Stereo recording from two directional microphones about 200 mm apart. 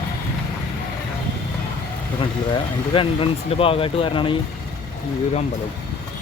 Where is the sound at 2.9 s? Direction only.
25° left (ahead or behind).